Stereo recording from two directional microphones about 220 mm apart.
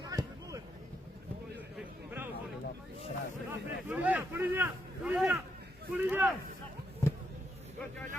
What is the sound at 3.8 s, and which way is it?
A man's voice, 5° right (ahead or behind).